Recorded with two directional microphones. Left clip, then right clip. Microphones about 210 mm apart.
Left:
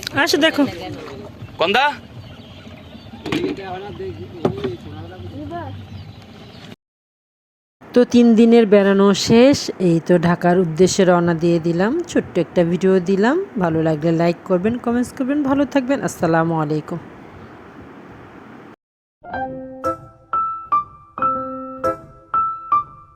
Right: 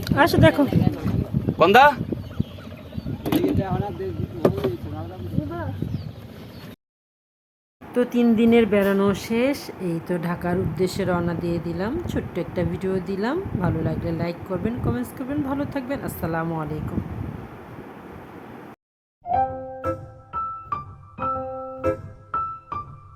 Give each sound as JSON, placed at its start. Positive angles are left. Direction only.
{"t": 0.0, "sound": "speech", "side_deg": 20}
{"t": 1.5, "sound": "speech", "side_deg": -20}
{"t": 3.2, "sound": "a sound", "side_deg": -45}
{"t": 7.9, "sound": "speech", "side_deg": 25}
{"t": 19.3, "sound": "music", "side_deg": 0}
{"t": 20.7, "sound": "keyboard", "side_deg": 0}
{"t": 21.2, "sound": "music", "side_deg": 0}